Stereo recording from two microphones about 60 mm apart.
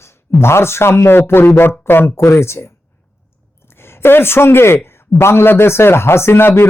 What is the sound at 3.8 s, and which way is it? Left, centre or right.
Speech, left.